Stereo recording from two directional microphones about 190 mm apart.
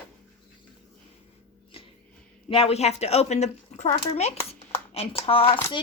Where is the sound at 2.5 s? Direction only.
30° left (ahead or behind).